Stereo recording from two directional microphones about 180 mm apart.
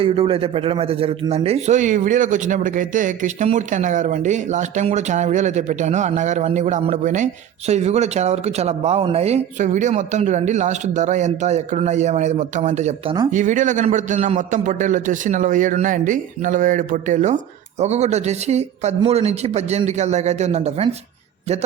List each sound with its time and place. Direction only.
0.0 s a man's voice: 30° right (ahead or behind)